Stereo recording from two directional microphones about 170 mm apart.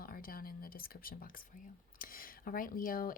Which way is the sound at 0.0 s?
55° left (ahead or behind).